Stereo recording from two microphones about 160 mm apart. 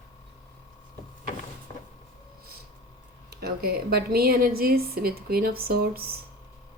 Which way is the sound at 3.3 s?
85° right.